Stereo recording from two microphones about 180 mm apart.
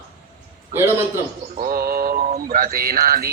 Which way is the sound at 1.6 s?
55° right (ahead or behind).